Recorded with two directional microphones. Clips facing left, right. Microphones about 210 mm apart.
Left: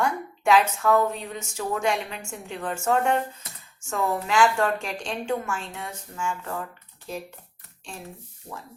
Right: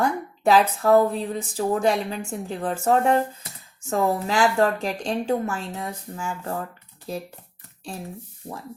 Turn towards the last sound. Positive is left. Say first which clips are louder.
# right 3 dB
turn(degrees=-40)  # may be behind; listen again after turning